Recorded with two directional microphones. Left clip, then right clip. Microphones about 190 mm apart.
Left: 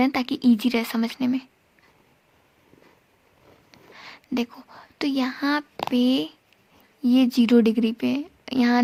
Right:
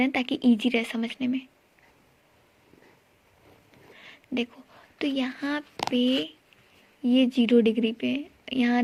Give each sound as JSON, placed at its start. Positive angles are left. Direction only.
{"t": 0.0, "sound": "a woman's voice", "side_deg": 40}
{"t": 3.9, "sound": "a sound", "side_deg": 40}
{"t": 5.9, "sound": "a woman's voice", "side_deg": 40}